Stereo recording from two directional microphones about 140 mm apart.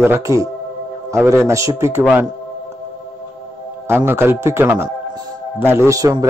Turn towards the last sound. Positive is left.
turn(degrees=-25)  # may be behind; listen again after turning